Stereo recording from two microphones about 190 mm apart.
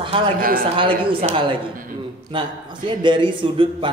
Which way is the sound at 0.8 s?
25° right (ahead or behind).